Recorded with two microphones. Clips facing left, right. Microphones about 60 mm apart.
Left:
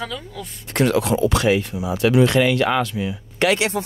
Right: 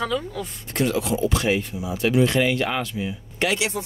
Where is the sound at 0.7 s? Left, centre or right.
Left.